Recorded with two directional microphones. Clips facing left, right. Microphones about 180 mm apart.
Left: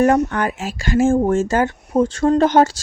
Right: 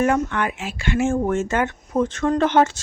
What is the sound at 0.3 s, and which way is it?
Speech, 40° left (ahead or behind).